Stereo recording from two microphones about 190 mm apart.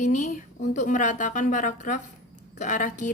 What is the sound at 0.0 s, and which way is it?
A woman's voice, 40° left (ahead or behind).